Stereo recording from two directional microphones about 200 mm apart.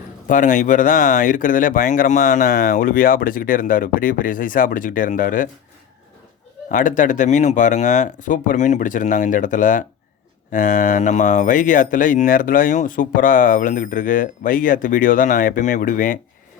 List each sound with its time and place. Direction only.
0.3 s speech: 40° left (ahead or behind)
6.7 s speech: 40° left (ahead or behind)